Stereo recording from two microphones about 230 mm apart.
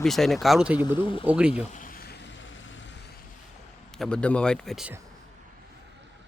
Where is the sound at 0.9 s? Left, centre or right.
Left.